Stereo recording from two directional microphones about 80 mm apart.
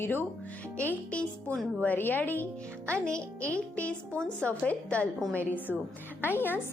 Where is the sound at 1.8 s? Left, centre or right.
Left.